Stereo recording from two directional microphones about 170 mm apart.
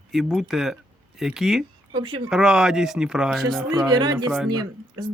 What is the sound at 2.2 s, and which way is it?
Speech, 5° right (ahead or behind).